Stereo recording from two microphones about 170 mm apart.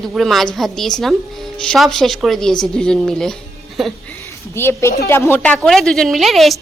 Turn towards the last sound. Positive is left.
turn(degrees=0)  # may be behind; listen again after turning